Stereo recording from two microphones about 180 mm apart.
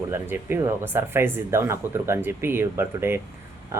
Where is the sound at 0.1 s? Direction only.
15° right (ahead or behind).